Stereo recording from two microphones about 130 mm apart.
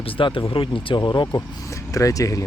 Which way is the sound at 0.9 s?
25° left (ahead or behind).